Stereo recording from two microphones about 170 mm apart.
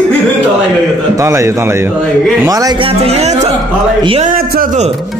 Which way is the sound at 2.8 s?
35° right (ahead or behind).